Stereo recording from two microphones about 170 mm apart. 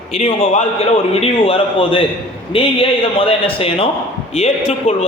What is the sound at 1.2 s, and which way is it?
A man's voice, 35° left (ahead or behind).